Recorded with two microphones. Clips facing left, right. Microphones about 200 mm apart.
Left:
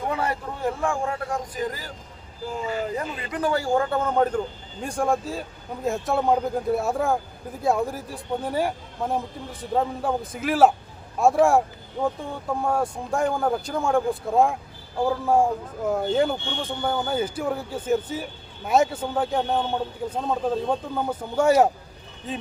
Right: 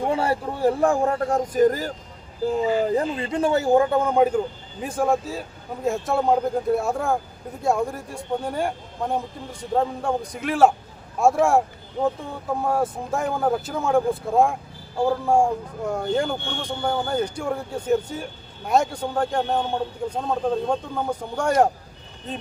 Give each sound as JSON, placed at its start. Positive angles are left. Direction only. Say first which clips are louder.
{"t": 0.0, "sound": "speech", "louder": "right 4 dB", "side_deg": -30}
{"t": 2.6, "sound": "speech", "louder": "right 5 dB", "side_deg": -35}